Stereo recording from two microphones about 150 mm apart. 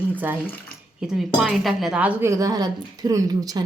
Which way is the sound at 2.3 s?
25° right (ahead or behind).